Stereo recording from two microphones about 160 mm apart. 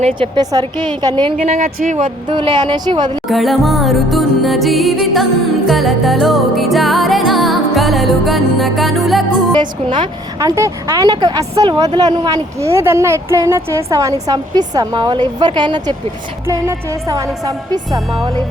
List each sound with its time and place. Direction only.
0.0 s speech: 30° right (ahead or behind)
1.4 s speech: 55° right (ahead or behind)
2.0 s speech: 30° right (ahead or behind)
3.2 s music: centre (ahead or behind)
9.6 s speech: 30° right (ahead or behind)